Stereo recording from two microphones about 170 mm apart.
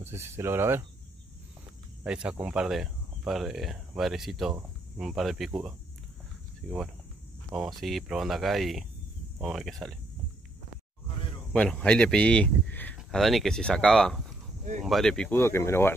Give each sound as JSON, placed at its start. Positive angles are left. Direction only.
{"t": 0.0, "sound": "speech", "side_deg": -15}
{"t": 2.0, "sound": "speech", "side_deg": -5}
{"t": 6.6, "sound": "speech", "side_deg": 5}
{"t": 11.5, "sound": "speech", "side_deg": 5}